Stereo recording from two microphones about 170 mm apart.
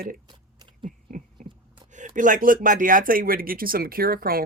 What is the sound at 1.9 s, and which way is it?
Speech, 50° right (ahead or behind).